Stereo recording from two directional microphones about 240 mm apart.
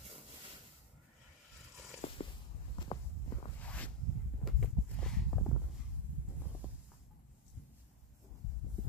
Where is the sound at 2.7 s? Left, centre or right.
Centre.